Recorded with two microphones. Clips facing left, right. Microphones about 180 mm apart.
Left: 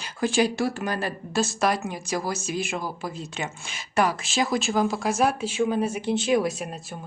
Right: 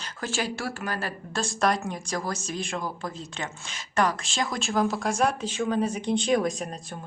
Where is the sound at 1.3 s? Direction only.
5° left (ahead or behind).